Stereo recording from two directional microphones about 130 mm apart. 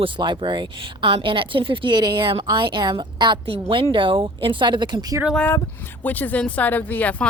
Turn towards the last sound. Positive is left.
turn(degrees=10)  # may be behind; listen again after turning